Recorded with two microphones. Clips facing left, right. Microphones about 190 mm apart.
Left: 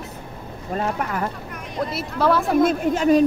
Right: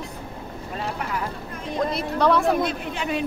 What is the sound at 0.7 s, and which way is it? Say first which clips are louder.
Speech: left 5 dB; 50° left (ahead or behind).